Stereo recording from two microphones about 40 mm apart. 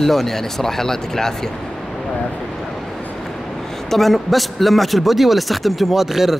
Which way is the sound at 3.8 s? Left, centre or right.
Centre.